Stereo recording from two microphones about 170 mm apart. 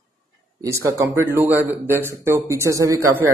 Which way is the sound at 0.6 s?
15° right (ahead or behind).